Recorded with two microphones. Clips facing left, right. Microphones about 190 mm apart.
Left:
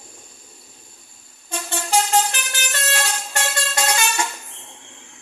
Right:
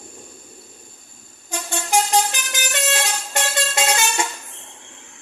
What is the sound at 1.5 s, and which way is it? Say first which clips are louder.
Vehicle: even; 15° right (ahead or behind).